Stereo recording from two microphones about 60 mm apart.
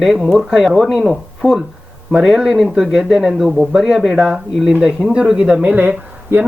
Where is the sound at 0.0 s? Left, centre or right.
Centre.